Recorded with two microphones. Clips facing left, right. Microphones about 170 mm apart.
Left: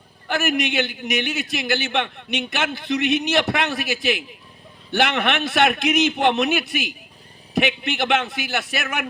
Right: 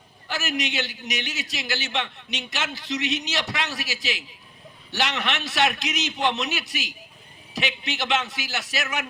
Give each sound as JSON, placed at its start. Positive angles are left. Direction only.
{"t": 0.3, "sound": "a man's voice", "side_deg": 55}